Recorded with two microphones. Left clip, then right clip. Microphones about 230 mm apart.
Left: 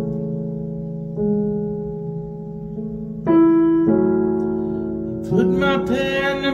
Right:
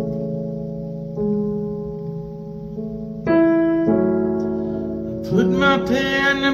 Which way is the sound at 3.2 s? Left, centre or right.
Left.